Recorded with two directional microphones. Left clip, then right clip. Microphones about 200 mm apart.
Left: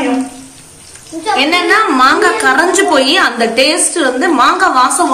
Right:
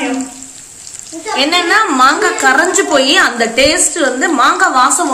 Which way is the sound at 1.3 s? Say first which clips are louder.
Left 1 dB; 35° right (ahead or behind).